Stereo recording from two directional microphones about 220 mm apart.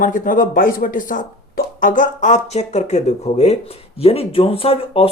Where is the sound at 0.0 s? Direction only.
35° left (ahead or behind).